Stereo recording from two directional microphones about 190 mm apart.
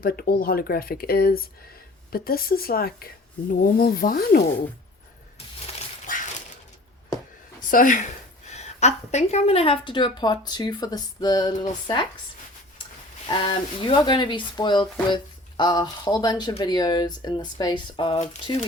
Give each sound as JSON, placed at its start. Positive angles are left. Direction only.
{"t": 0.0, "sound": "speech", "side_deg": 50}
{"t": 7.7, "sound": "a woman's voice", "side_deg": 45}
{"t": 13.2, "sound": "a woman's voice", "side_deg": 25}